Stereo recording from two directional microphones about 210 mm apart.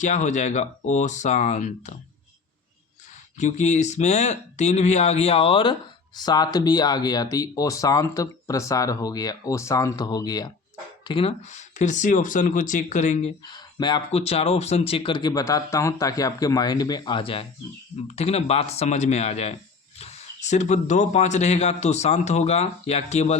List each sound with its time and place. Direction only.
0.0 s speech: 35° left (ahead or behind)
3.3 s speech: 35° left (ahead or behind)
13.4 s speech: 20° left (ahead or behind)